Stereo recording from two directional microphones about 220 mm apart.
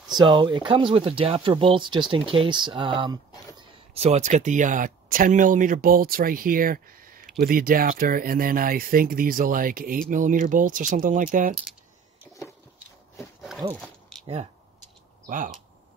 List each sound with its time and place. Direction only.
0.1 s speech: 20° right (ahead or behind); by 11.5 s 35° right (ahead or behind)
13.7 s a sound: 5° left (ahead or behind)
14.2 s speech: 25° right (ahead or behind)
15.2 s speech: 35° right (ahead or behind)